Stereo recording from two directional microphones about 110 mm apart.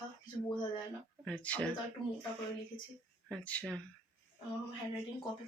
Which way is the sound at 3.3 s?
10° left (ahead or behind).